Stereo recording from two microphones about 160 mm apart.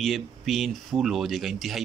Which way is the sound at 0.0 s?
Centre (ahead or behind).